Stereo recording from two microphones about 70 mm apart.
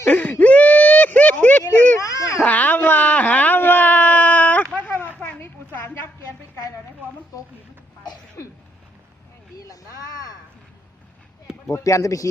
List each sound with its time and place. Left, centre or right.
0.1 s whimper: left
2.0 s children playing: left
2.4 s a sound: left
11.7 s speech: left